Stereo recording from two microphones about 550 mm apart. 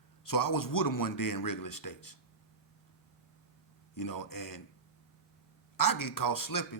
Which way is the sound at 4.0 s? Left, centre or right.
Left.